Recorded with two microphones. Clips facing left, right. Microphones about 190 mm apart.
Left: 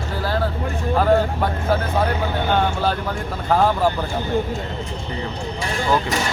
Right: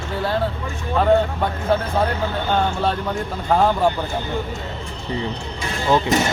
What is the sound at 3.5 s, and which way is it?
Speech, centre (ahead or behind).